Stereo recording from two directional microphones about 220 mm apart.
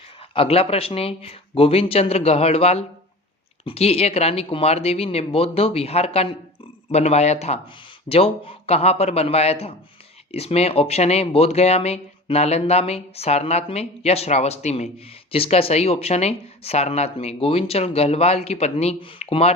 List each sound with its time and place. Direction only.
0.3 s speech: 25° left (ahead or behind)